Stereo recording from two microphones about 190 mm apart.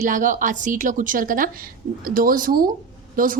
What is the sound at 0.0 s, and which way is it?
A woman's voice, 45° right (ahead or behind).